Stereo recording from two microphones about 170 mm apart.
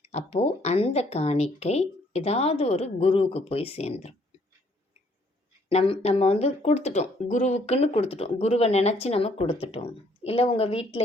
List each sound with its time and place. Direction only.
0.0 s speech: 40° left (ahead or behind)
5.6 s speech: 35° left (ahead or behind)